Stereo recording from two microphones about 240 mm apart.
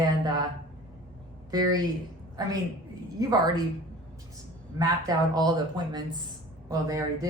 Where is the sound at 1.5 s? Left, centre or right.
Centre.